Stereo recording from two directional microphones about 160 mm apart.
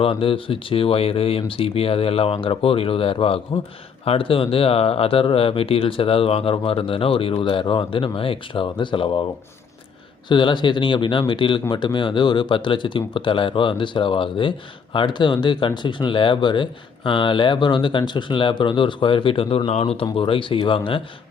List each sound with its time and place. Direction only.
0.0 s speech: 35° left (ahead or behind)
10.2 s speech: 30° left (ahead or behind)